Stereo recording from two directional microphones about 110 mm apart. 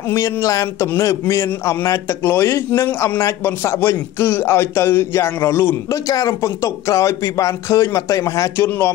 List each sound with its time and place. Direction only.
0.1 s a man's voice: 30° left (ahead or behind)